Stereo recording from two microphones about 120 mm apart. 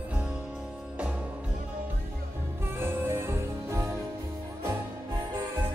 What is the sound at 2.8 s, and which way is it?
Music, 20° right (ahead or behind).